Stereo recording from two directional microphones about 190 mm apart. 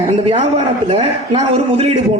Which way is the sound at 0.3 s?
35° right (ahead or behind).